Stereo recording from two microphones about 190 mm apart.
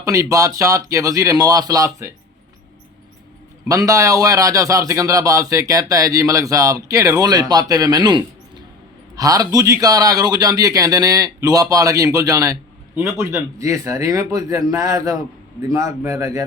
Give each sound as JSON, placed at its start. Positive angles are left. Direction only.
{"t": 0.0, "sound": "a man's voice", "side_deg": -15}
{"t": 3.7, "sound": "a man's voice", "side_deg": -15}